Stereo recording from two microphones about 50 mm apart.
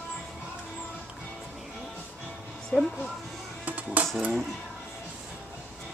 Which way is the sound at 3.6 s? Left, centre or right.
Right.